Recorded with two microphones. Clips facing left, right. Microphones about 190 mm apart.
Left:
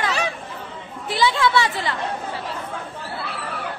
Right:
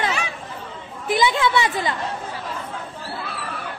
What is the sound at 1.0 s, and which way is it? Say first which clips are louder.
Chatter: right 1 dB; 20° right (ahead or behind).